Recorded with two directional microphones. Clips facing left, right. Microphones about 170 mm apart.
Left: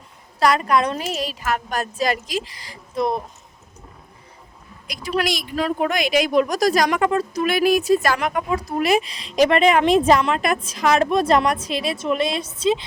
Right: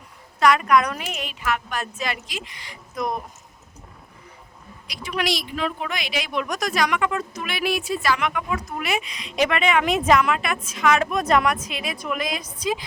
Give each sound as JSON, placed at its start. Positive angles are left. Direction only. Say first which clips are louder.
{"t": 0.3, "sound": "speech", "louder": "even", "side_deg": 35}
{"t": 4.9, "sound": "a woman's voice", "louder": "left 3 dB", "side_deg": 40}